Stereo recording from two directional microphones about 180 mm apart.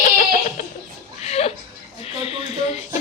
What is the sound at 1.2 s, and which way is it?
Chuckle, 35° left (ahead or behind).